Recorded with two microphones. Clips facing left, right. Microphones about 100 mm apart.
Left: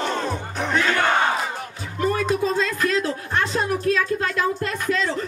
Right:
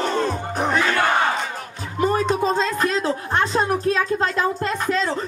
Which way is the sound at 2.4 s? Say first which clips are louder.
Right 2 dB; 35° right (ahead or behind).